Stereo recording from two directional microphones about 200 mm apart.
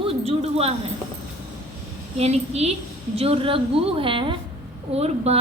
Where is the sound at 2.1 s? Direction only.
30° right (ahead or behind).